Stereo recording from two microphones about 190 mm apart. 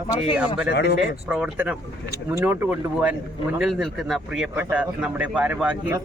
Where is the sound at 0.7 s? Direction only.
60° left (ahead or behind).